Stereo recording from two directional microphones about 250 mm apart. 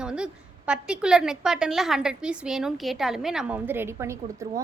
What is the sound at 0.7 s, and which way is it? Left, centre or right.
A woman's voice, centre.